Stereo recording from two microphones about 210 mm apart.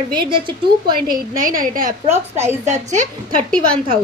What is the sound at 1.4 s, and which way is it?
Speech, 40° right (ahead or behind).